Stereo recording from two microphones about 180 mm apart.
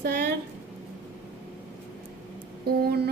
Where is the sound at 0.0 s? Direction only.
65° right (ahead or behind).